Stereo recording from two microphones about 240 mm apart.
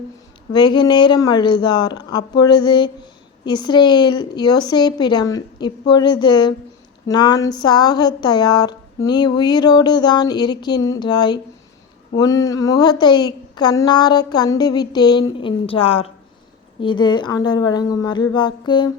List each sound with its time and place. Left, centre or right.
0.5 s speech: centre